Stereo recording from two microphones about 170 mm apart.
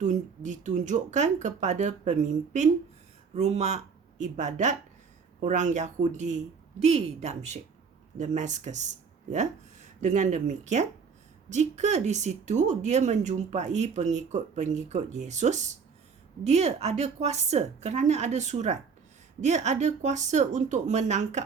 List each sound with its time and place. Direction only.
0.0 s a woman's voice: 45° right (ahead or behind)